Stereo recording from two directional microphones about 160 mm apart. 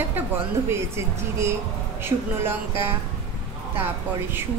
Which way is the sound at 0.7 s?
15° right (ahead or behind).